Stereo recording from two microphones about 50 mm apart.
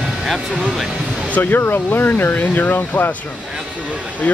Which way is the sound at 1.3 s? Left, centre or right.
Left.